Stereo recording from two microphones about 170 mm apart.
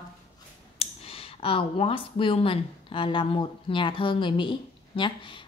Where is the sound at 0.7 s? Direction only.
35° left (ahead or behind).